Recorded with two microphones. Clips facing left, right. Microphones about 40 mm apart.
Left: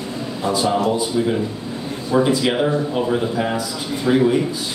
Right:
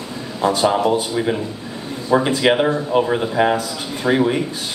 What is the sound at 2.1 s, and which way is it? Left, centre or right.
Speech, right.